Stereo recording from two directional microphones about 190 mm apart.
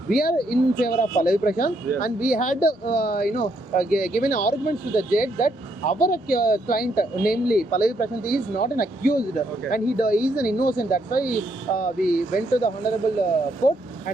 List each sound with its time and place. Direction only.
0.1 s speech: 55° left (ahead or behind)